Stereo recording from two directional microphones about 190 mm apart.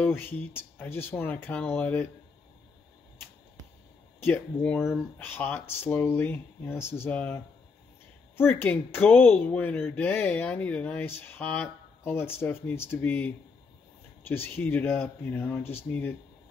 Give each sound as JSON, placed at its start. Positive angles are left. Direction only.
{"t": 0.0, "sound": "speech", "side_deg": 10}
{"t": 4.2, "sound": "speech", "side_deg": 10}